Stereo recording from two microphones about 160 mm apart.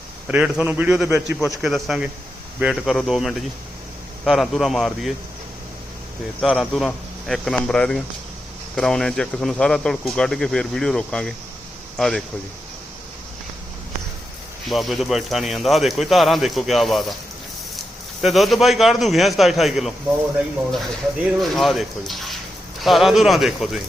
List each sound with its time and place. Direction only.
0.3 s a man's voice: 5° right (ahead or behind)
6.4 s speech: centre (ahead or behind)
14.7 s speech: centre (ahead or behind)
18.2 s speech: centre (ahead or behind)